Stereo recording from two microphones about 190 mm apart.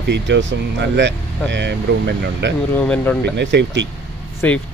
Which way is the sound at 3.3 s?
70° right (ahead or behind).